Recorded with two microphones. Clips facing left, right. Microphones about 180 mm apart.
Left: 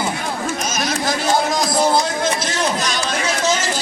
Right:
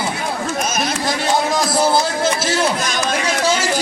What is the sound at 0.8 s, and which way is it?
A man's voice, centre (ahead or behind).